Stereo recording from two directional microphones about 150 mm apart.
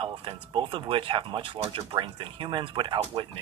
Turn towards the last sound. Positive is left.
turn(degrees=-30)  # may be behind; listen again after turning